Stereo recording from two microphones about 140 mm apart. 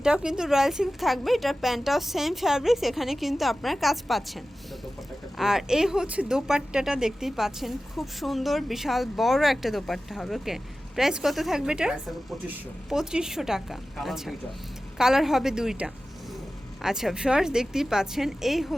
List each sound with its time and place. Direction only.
0.0 s speech: 5° right (ahead or behind)